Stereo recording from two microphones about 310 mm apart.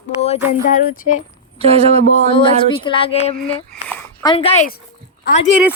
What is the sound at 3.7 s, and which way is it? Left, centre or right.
Speech, centre.